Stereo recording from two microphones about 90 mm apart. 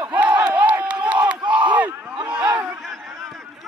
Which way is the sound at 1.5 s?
15° right (ahead or behind).